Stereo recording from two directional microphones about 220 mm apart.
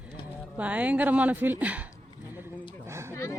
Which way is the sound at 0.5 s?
5° right (ahead or behind).